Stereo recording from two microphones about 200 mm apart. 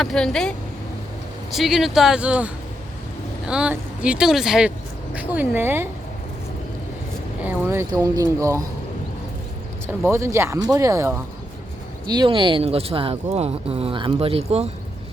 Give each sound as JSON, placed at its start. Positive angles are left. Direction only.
{"t": 0.0, "sound": "speech", "side_deg": 0}
{"t": 3.5, "sound": "speech", "side_deg": -5}
{"t": 7.4, "sound": "speech", "side_deg": -15}
{"t": 10.1, "sound": "speech", "side_deg": -15}